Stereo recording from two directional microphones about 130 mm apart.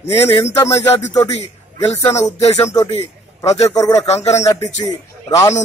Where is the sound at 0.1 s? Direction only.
20° left (ahead or behind).